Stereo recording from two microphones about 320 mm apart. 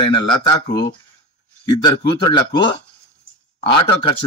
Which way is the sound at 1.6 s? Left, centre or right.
Centre.